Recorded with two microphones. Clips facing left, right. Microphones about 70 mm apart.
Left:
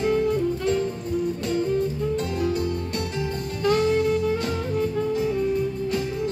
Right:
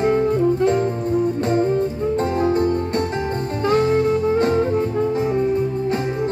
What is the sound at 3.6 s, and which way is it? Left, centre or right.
Saxophone, right.